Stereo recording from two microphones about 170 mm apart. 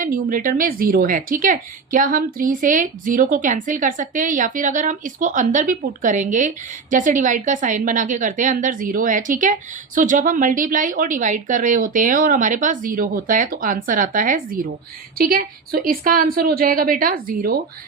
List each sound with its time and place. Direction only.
0.0 s a woman's voice: 55° right (ahead or behind)